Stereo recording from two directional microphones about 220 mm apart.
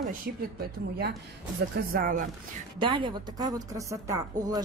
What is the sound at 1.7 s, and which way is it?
Speech, 40° right (ahead or behind).